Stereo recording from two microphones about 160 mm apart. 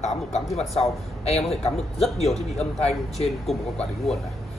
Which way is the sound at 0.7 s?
Centre (ahead or behind).